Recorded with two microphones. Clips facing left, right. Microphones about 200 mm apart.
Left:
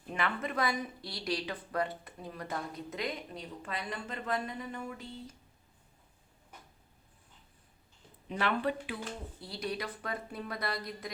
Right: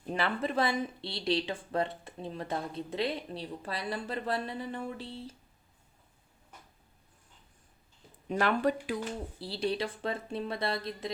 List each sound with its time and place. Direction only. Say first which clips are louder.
0.1 s a woman's voice: right 4 dB; 30° right (ahead or behind)
8.3 s speech: right 4 dB; 45° right (ahead or behind)
9.4 s a woman's voice: right 6 dB; 30° right (ahead or behind)